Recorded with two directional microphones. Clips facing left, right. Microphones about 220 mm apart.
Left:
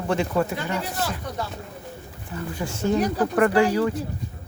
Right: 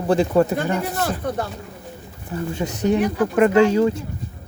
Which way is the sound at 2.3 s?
25° right (ahead or behind).